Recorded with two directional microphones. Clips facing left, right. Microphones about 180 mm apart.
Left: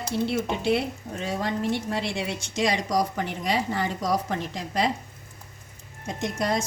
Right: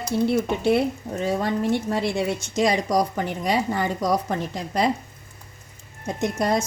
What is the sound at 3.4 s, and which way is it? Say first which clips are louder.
Speech: right 3 dB; 45° right (ahead or behind).